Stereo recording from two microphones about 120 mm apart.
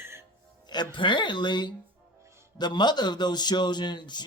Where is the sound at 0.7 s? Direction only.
40° left (ahead or behind).